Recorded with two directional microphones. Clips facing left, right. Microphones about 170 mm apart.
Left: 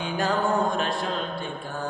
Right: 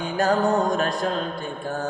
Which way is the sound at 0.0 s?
45° right (ahead or behind).